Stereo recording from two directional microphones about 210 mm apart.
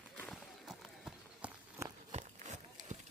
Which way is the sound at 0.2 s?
Centre (ahead or behind).